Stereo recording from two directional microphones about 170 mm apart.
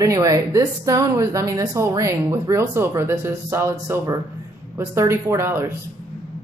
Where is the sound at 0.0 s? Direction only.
20° right (ahead or behind).